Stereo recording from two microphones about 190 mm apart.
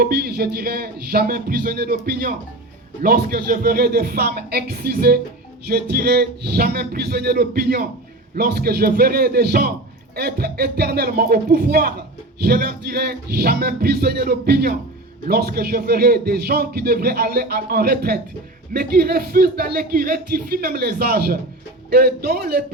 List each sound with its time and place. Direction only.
0.0 s speech: 55° right (ahead or behind)